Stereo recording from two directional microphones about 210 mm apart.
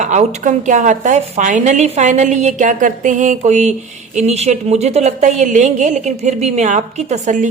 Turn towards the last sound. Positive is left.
turn(degrees=-35)  # may be behind; listen again after turning